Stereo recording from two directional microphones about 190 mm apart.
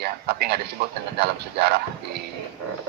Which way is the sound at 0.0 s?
60° right (ahead or behind).